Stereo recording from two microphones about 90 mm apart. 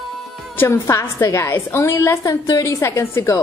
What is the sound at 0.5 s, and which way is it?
A woman's voice, 30° left (ahead or behind).